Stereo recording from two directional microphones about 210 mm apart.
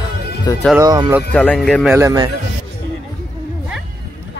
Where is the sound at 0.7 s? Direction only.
15° right (ahead or behind).